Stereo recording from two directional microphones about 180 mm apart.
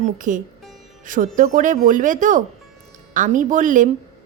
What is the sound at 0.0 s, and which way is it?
A woman's voice, 45° right (ahead or behind).